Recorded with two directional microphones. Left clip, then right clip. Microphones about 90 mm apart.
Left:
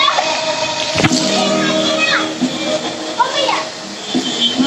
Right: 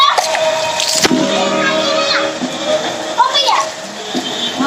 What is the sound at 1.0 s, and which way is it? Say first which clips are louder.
Music: right 1 dB; 30° right (ahead or behind).